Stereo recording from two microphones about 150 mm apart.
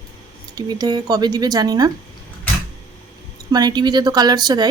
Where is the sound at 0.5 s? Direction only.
25° right (ahead or behind).